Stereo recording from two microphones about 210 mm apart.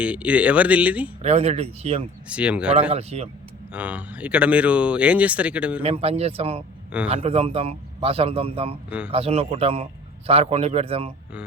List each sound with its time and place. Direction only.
0.0 s speech: 5° right (ahead or behind)
1.2 s speech: 30° right (ahead or behind)
2.3 s speech: 5° right (ahead or behind)
2.9 s speech: 30° right (ahead or behind)
3.7 s speech: 5° right (ahead or behind)
5.8 s speech: 30° right (ahead or behind)